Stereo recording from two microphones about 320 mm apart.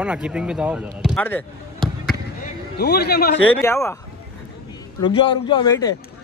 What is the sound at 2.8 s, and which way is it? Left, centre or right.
Speech, left.